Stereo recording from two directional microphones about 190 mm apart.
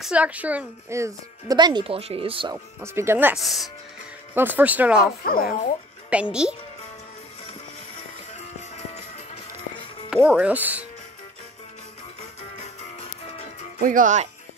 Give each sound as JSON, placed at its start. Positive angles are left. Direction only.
{"t": 0.0, "sound": "speech", "side_deg": -5}
{"t": 2.8, "sound": "speech", "side_deg": -15}
{"t": 5.2, "sound": "a woman's voice", "side_deg": 50}
{"t": 6.1, "sound": "speech", "side_deg": -5}
{"t": 8.5, "sound": "music", "side_deg": 35}
{"t": 10.0, "sound": "speech", "side_deg": -5}
{"t": 13.7, "sound": "speech", "side_deg": -45}